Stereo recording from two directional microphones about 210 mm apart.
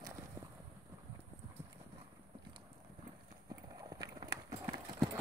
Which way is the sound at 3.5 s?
15° right (ahead or behind).